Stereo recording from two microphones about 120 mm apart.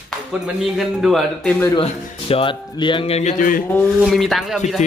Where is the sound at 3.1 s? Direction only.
75° left (ahead or behind).